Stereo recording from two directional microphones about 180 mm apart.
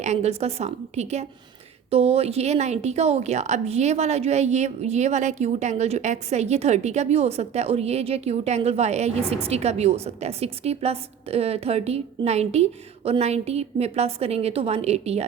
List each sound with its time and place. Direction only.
0.0 s a woman's voice: 40° right (ahead or behind)